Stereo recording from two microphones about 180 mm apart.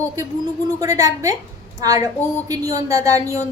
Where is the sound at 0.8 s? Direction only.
20° right (ahead or behind).